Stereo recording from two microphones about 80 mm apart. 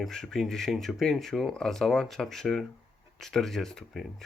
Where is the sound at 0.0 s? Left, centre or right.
Centre.